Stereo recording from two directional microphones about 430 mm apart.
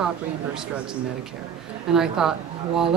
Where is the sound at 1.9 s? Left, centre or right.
Centre.